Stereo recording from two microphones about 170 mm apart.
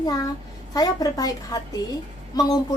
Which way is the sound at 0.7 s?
20° left (ahead or behind).